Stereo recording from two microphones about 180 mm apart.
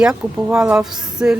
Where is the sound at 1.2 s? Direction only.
10° right (ahead or behind).